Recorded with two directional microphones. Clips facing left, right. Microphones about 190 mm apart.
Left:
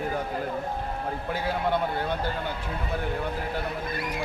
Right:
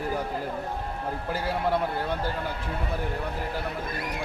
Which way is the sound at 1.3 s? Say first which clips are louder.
Even; centre (ahead or behind).